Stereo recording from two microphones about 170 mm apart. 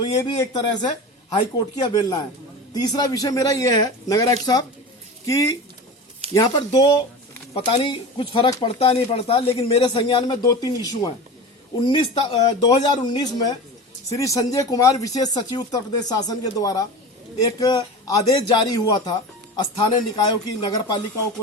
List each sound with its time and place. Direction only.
0.0 s speech: 25° left (ahead or behind)